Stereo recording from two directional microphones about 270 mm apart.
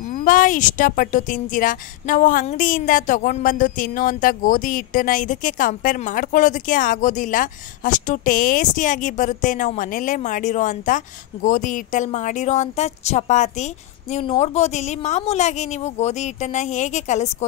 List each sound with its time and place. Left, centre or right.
0.1 s speech: left